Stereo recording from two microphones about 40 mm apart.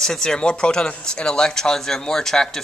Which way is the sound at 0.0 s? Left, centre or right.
Centre.